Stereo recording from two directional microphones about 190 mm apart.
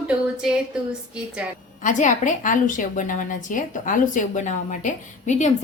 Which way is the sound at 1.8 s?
40° left (ahead or behind).